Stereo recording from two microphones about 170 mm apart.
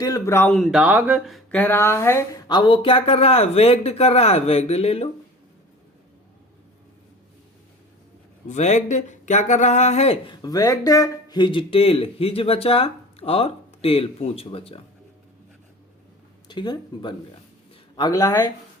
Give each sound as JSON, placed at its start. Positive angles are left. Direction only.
{"t": 0.0, "sound": "speech", "side_deg": 15}
{"t": 0.5, "sound": "speech", "side_deg": 0}
{"t": 8.4, "sound": "speech", "side_deg": 45}
{"t": 10.3, "sound": "speech", "side_deg": 20}
{"t": 16.5, "sound": "speech", "side_deg": 25}